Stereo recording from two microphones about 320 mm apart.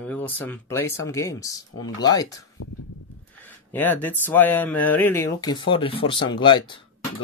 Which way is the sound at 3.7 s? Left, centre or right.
Centre.